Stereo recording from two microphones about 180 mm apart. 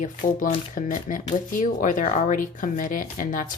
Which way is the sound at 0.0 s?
45° left (ahead or behind).